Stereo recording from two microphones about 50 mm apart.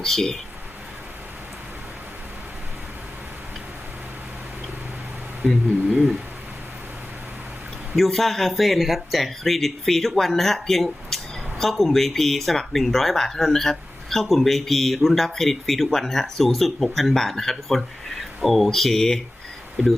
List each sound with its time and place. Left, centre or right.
0.0 s speech: centre
5.4 s speech: centre
7.9 s speech: centre